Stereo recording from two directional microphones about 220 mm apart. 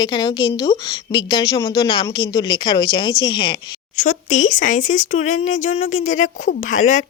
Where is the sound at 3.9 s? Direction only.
35° left (ahead or behind).